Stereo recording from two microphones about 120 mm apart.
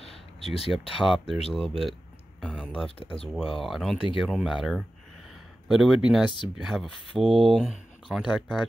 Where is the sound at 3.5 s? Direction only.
Centre (ahead or behind).